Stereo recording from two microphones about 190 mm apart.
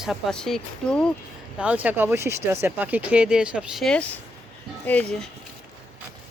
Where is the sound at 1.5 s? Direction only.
5° right (ahead or behind).